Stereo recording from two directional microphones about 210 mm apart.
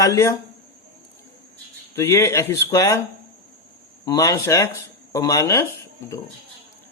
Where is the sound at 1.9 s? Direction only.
10° left (ahead or behind).